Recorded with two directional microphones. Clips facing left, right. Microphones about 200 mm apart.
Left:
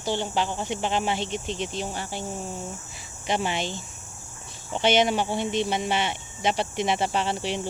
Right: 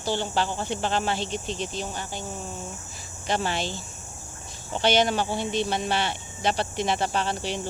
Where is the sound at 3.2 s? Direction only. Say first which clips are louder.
Even; 20° left (ahead or behind).